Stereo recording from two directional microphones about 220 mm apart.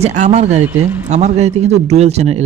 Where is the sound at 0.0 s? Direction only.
30° right (ahead or behind).